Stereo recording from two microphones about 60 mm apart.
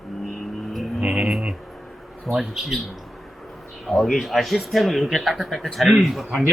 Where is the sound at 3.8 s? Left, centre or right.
Centre.